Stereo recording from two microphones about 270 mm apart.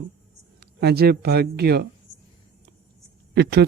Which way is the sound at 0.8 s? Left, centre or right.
Right.